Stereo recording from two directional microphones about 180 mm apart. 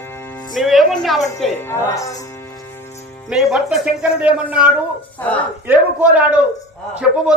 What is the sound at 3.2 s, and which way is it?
A man's voice, centre (ahead or behind).